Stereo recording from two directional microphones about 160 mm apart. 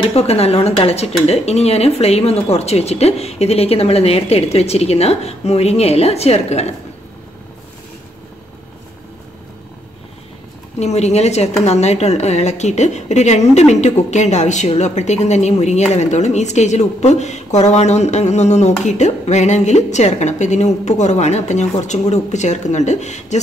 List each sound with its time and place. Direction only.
0.1 s speech: 40° left (ahead or behind)
10.8 s a woman's voice: 45° left (ahead or behind)